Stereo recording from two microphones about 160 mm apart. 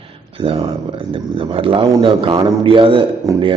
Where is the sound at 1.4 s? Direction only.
35° right (ahead or behind).